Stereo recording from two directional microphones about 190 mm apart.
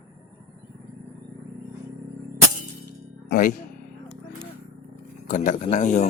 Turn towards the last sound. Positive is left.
turn(degrees=35)  # may be behind; listen again after turning